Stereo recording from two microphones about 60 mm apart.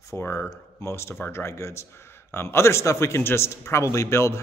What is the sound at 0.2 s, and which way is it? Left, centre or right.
Speech, left.